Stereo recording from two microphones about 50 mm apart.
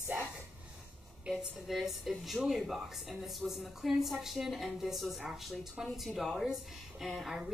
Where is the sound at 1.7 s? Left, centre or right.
Centre.